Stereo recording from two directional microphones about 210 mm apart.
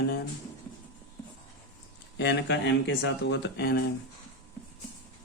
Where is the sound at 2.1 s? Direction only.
55° left (ahead or behind).